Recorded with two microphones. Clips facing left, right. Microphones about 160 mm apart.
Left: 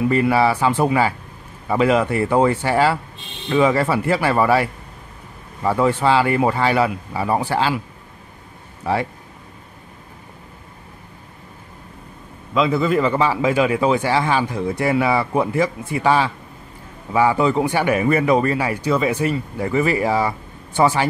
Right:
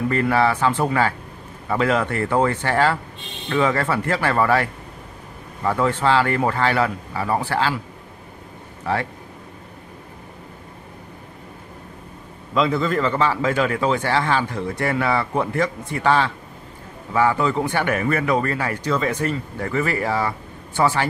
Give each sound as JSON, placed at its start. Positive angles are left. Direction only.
{"t": 0.1, "sound": "speech", "side_deg": 10}
{"t": 8.8, "sound": "speech", "side_deg": 15}
{"t": 12.5, "sound": "speech", "side_deg": 5}